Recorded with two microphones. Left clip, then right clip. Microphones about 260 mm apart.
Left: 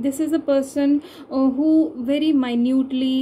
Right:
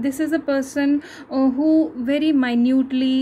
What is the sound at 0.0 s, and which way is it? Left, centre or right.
A woman's voice, right.